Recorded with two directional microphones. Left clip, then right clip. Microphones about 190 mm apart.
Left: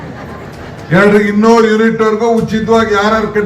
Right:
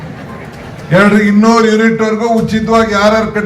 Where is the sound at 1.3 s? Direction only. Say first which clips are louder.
Left 1 dB; 30° right (ahead or behind).